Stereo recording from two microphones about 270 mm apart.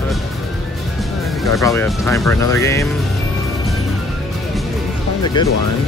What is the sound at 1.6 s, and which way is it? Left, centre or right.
Speech, centre.